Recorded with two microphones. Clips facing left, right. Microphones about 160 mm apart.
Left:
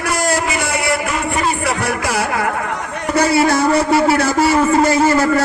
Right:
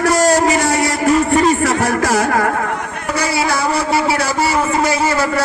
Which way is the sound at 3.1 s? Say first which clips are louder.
Left 4 dB; 55° left (ahead or behind).